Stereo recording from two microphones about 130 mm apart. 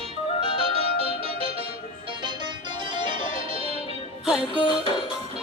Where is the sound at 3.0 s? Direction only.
40° right (ahead or behind).